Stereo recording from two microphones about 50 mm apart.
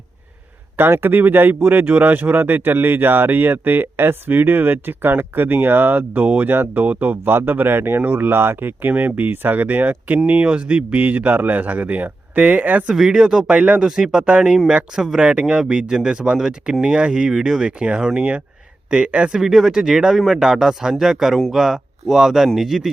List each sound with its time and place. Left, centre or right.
0.8 s speech: right
10.4 s speech: right
12.9 s speech: centre
13.6 s speech: right
13.8 s speech: centre
14.9 s speech: centre
15.2 s speech: centre
19.3 s a man's voice: centre